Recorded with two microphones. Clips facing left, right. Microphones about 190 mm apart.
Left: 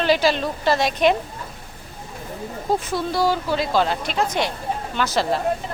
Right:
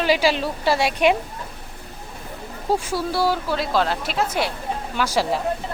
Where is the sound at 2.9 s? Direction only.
5° right (ahead or behind).